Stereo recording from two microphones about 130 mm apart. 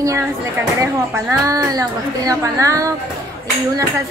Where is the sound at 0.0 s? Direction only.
25° right (ahead or behind).